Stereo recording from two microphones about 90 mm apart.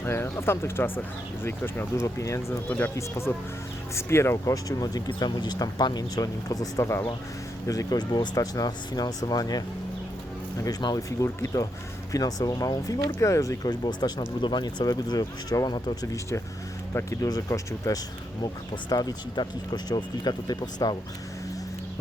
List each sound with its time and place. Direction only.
0.0 s speech: 25° left (ahead or behind)
2.6 s speech: 20° left (ahead or behind)
4.5 s speech: 45° left (ahead or behind)
7.7 s speech: 45° left (ahead or behind)
12.1 s speech: 45° left (ahead or behind)
16.9 s speech: 25° left (ahead or behind)
17.2 s speech: 50° left (ahead or behind)